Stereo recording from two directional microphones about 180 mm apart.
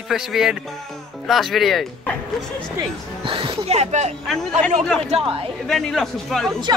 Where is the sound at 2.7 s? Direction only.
30° right (ahead or behind).